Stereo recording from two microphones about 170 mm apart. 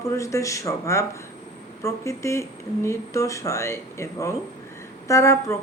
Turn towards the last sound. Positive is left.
turn(degrees=15)  # may be behind; listen again after turning